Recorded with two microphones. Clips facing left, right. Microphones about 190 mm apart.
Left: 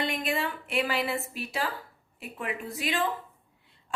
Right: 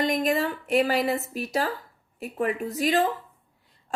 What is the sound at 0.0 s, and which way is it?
A woman's voice, 40° right (ahead or behind).